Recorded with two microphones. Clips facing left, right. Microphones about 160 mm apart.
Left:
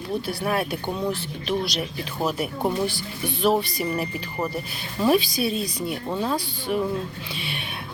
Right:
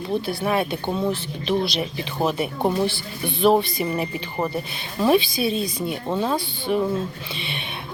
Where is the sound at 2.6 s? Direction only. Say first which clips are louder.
Right 3 dB; 30° right (ahead or behind).